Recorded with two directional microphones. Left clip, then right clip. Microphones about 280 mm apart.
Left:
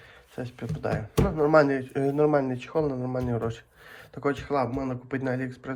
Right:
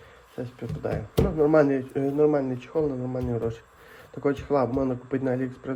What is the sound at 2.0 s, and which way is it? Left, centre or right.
Speech, left.